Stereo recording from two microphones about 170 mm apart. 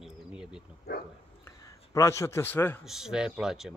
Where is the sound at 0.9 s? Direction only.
70° left (ahead or behind).